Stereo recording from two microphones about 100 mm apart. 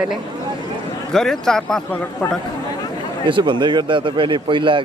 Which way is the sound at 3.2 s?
55° right (ahead or behind).